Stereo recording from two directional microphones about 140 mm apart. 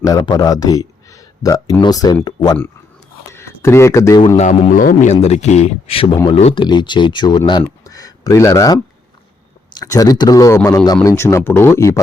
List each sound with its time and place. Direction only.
0.0 s speech: 30° left (ahead or behind)
3.3 s speech: 20° left (ahead or behind)
4.4 s music: 60° left (ahead or behind)
5.2 s speech: 50° left (ahead or behind); by 12.0 s 20° left (ahead or behind)